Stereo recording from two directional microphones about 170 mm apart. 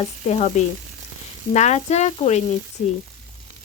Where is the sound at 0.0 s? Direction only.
40° left (ahead or behind).